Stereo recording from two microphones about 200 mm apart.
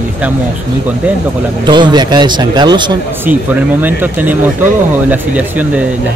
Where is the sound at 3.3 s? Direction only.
10° right (ahead or behind).